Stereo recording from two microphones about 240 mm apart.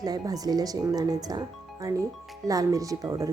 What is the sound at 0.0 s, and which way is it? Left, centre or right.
Speech, centre.